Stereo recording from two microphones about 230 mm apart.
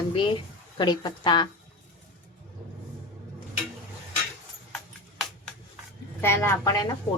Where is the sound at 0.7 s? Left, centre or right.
Centre.